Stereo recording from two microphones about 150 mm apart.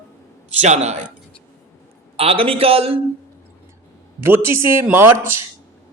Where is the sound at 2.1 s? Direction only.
40° right (ahead or behind).